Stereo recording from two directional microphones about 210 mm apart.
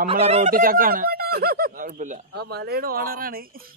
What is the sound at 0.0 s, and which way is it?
Speech, 30° right (ahead or behind).